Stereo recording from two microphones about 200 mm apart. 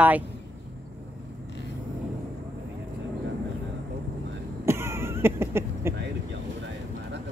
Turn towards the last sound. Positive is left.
turn(degrees=-10)  # may be behind; listen again after turning